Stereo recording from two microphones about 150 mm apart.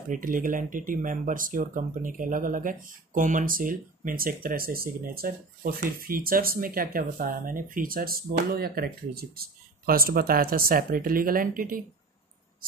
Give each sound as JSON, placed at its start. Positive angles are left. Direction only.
{"t": 0.1, "sound": "speech", "side_deg": -65}